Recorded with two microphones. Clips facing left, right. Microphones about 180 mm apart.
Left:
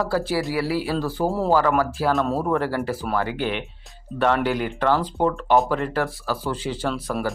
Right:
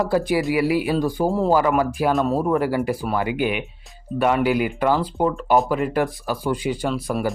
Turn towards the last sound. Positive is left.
turn(degrees=-10)  # may be behind; listen again after turning